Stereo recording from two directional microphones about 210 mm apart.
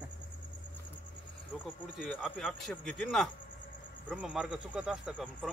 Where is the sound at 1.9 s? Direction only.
Centre (ahead or behind).